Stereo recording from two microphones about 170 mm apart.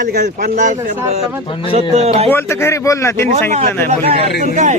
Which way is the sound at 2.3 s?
15° left (ahead or behind).